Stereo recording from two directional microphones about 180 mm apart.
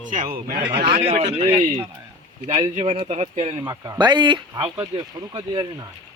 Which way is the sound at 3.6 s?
20° right (ahead or behind).